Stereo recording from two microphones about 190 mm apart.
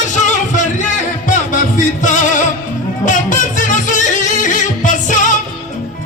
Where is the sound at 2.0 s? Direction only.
40° left (ahead or behind).